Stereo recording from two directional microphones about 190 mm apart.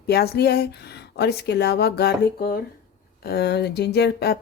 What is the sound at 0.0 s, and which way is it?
Speech, 55° left (ahead or behind).